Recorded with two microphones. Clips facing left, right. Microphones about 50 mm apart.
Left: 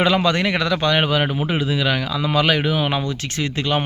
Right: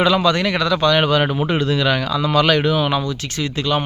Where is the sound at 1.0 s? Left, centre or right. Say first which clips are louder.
Right 3 dB; centre.